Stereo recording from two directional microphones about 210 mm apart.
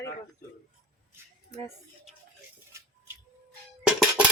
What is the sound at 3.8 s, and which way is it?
Music, 5° right (ahead or behind).